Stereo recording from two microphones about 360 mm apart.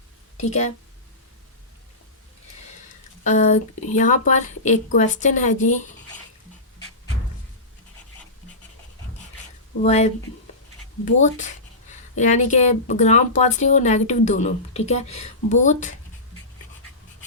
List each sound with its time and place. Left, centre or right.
0.4 s speech: centre
3.2 s speech: centre
9.8 s speech: centre
11.2 s speech: centre